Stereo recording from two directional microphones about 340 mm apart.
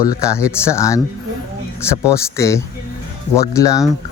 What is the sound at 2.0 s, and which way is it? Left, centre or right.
Speech, centre.